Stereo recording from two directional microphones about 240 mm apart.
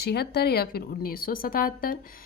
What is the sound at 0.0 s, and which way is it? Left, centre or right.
A woman's voice, left.